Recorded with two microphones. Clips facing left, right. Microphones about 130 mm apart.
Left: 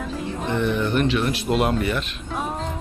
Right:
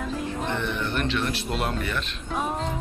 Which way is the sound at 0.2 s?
5° left (ahead or behind).